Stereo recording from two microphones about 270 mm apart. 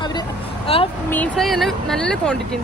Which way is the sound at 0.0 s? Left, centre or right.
Centre.